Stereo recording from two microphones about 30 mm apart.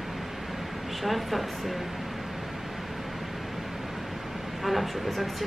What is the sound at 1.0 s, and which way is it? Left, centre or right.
Speech, centre.